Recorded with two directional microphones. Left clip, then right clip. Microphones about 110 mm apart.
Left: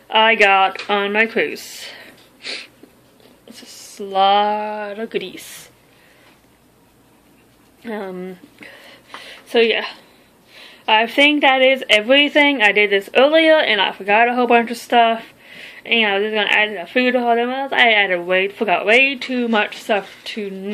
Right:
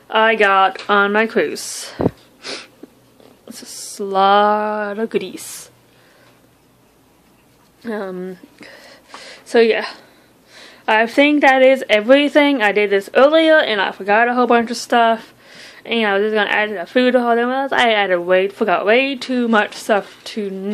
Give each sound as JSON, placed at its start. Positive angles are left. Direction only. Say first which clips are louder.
{"t": 0.1, "sound": "a woman's voice", "louder": "left 1 dB", "side_deg": -25}
{"t": 4.0, "sound": "a woman's voice", "louder": "right 2 dB", "side_deg": -50}
{"t": 7.8, "sound": "speech", "louder": "right 2 dB", "side_deg": -30}
{"t": 9.2, "sound": "a sound", "louder": "right 2 dB", "side_deg": -45}
{"t": 10.9, "sound": "a woman's voice", "louder": "even", "side_deg": -45}
{"t": 12.6, "sound": "a woman's voice", "louder": "left 1 dB", "side_deg": -25}